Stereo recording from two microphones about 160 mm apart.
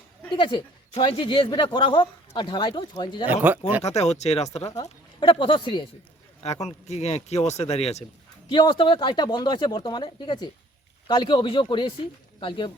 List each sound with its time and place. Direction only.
0.3 s speech: 30° left (ahead or behind)
3.8 s speech: 45° left (ahead or behind)
4.7 s speech: 20° left (ahead or behind)
5.3 s speech: 35° left (ahead or behind)
6.4 s speech: 45° left (ahead or behind)
8.4 s speech: 30° left (ahead or behind)